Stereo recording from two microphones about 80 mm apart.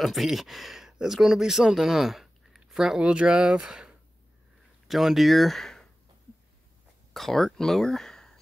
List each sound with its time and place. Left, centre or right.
0.0 s speech: centre
7.2 s speech: centre